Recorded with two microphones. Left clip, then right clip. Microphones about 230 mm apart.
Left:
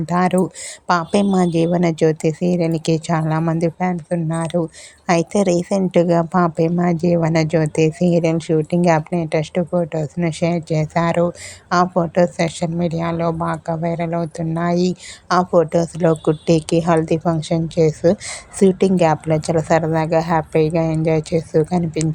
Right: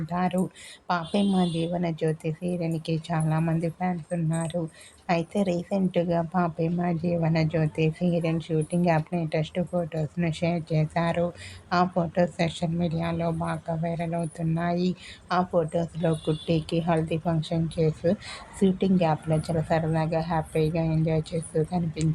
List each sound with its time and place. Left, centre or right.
0.0 s a woman's voice: left